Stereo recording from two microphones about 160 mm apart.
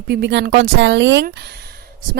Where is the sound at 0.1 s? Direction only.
90° right.